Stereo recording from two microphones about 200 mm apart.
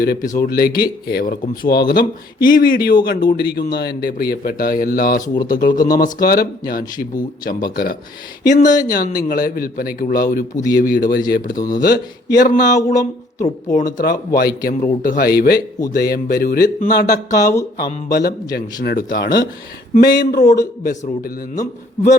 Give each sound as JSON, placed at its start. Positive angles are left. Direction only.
{"t": 0.0, "sound": "a man's voice", "side_deg": 45}
{"t": 5.2, "sound": "speech", "side_deg": 20}
{"t": 5.5, "sound": "a man's voice", "side_deg": 45}
{"t": 5.7, "sound": "speech", "side_deg": 20}
{"t": 6.2, "sound": "a man's voice", "side_deg": 50}
{"t": 8.6, "sound": "speech", "side_deg": 20}
{"t": 8.9, "sound": "a man's voice", "side_deg": 45}
{"t": 12.7, "sound": "speech", "side_deg": 15}
{"t": 13.7, "sound": "a man's voice", "side_deg": 40}